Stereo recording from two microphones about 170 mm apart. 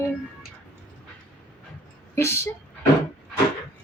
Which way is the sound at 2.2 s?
15° left (ahead or behind).